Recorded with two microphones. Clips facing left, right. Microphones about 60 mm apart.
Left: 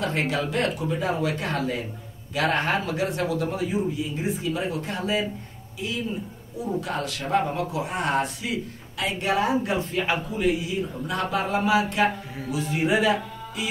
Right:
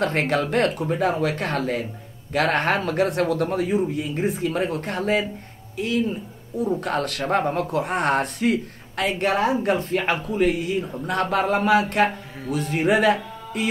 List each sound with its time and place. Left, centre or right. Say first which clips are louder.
0.0 s speech: right 4 dB; right